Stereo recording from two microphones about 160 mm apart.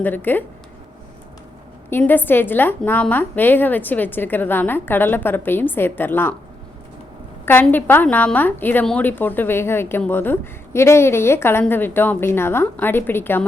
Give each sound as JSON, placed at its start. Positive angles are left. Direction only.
{"t": 0.0, "sound": "a woman's voice", "side_deg": 10}
{"t": 1.9, "sound": "a woman's voice", "side_deg": 10}
{"t": 7.4, "sound": "a woman's voice", "side_deg": 10}